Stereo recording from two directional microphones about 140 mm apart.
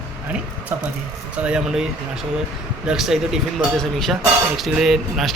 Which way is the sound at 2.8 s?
5° right (ahead or behind).